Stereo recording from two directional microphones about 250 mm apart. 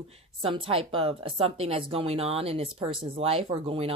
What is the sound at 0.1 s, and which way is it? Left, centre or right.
Speech, right.